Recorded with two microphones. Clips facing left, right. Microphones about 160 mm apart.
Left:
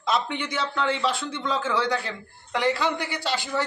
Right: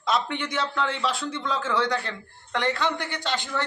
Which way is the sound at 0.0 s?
Centre (ahead or behind).